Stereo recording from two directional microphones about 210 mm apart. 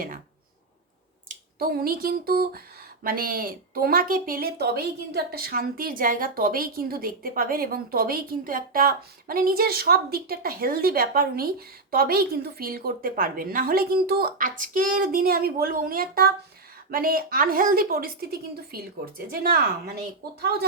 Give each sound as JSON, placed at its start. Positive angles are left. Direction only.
{"t": 1.3, "sound": "speech", "side_deg": -45}